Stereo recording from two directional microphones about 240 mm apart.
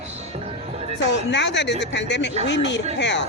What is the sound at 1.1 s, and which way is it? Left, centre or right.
A woman's voice, left.